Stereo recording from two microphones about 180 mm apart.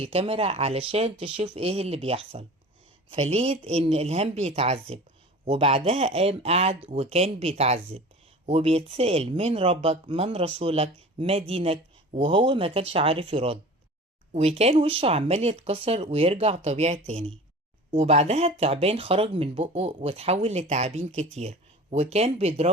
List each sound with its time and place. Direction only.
0.0 s speech: 35° right (ahead or behind)